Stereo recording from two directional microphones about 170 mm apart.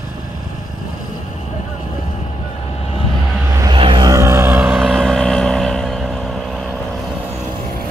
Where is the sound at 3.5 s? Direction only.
25° right (ahead or behind); by 4.8 s 10° right (ahead or behind).